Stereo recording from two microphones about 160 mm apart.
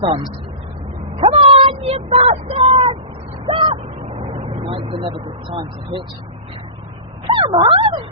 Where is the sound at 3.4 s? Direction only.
30° right (ahead or behind).